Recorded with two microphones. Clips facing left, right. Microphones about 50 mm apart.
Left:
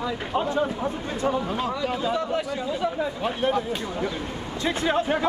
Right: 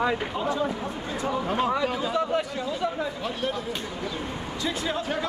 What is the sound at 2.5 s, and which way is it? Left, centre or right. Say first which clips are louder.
Speech: left 2 dB; centre.